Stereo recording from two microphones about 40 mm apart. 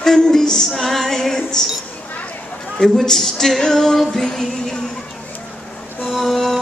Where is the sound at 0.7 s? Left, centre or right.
Centre.